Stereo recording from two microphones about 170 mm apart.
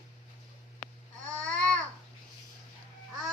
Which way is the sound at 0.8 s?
5° left (ahead or behind).